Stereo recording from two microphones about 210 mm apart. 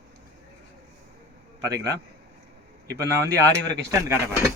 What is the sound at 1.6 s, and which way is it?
Speech, 15° right (ahead or behind).